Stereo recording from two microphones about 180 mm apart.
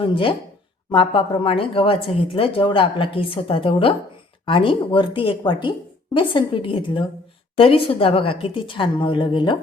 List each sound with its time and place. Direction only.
0.0 s speech: 30° left (ahead or behind)